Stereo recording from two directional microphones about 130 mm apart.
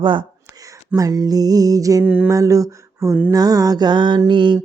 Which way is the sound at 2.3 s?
25° right (ahead or behind).